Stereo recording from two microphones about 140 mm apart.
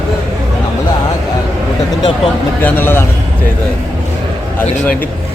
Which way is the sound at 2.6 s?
15° left (ahead or behind).